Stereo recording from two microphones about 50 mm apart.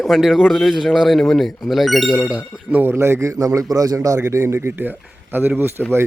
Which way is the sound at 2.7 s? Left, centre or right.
Right.